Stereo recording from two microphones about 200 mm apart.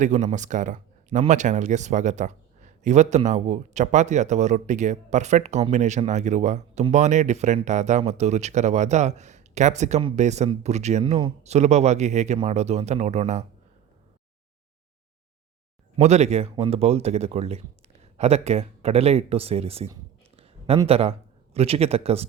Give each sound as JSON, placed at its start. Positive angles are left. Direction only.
{"t": 0.0, "sound": "speech", "side_deg": -35}
{"t": 16.0, "sound": "speech", "side_deg": -35}